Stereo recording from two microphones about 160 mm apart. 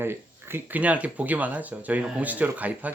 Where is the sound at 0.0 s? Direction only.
15° right (ahead or behind).